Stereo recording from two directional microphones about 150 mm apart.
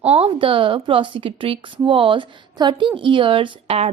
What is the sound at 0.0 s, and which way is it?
A woman's voice, 40° right (ahead or behind).